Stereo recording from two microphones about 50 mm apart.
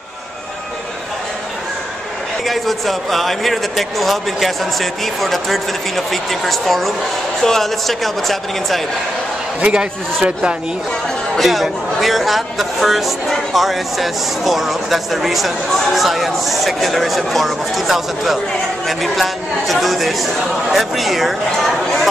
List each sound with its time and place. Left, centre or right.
2.4 s a man's voice: centre
9.6 s a man's voice: right
11.3 s a man's voice: centre